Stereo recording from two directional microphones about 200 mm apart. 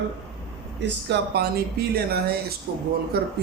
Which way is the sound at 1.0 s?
55° right (ahead or behind).